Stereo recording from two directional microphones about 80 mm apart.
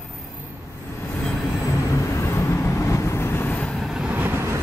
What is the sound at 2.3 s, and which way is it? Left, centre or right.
Vehicle, left.